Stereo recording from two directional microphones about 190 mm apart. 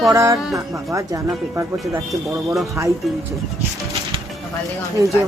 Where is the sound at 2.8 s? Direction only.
15° right (ahead or behind).